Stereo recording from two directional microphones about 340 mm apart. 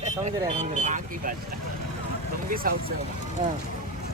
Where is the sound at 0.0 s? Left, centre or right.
Centre.